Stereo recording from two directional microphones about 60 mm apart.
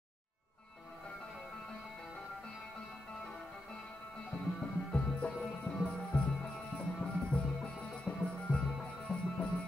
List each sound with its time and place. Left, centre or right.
4.6 s music: centre